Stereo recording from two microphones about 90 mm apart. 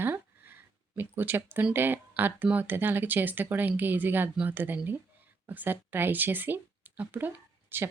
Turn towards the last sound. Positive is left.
turn(degrees=-25)  # may be behind; listen again after turning